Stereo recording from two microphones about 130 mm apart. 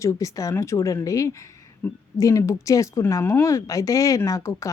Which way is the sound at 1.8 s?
15° left (ahead or behind).